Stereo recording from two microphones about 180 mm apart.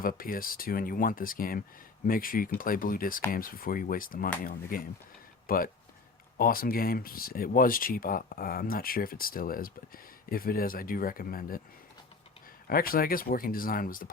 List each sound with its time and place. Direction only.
0.0 s speech: 50° left (ahead or behind)
12.6 s speech: 55° left (ahead or behind)